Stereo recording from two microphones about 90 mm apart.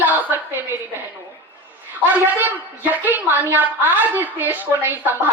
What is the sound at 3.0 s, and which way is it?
A woman's voice, 20° right (ahead or behind).